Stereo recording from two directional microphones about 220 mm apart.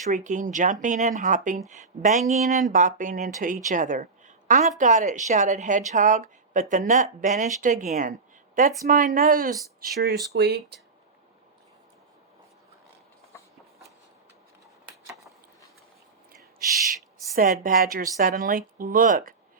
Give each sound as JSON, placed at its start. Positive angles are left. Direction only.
{"t": 0.0, "sound": "speech", "side_deg": -35}
{"t": 9.1, "sound": "speech", "side_deg": -40}
{"t": 17.3, "sound": "speech", "side_deg": -40}